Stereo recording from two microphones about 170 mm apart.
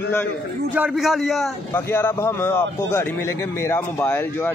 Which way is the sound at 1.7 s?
15° left (ahead or behind).